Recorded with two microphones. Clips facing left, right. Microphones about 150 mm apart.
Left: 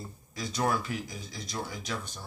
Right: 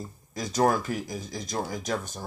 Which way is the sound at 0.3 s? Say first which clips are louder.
Right 6 dB; 45° right (ahead or behind).